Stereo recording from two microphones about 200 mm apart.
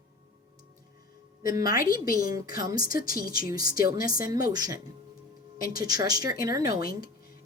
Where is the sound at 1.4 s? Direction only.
20° right (ahead or behind).